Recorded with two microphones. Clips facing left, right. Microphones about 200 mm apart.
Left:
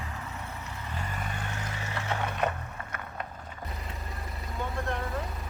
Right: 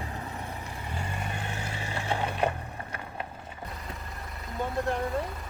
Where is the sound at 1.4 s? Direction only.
30° right (ahead or behind).